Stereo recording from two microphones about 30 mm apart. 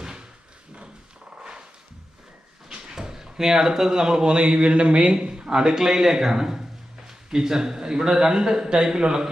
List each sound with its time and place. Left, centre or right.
0.0 s a sound: right
2.6 s speech: centre; by 5.1 s right
5.2 s a man's voice: right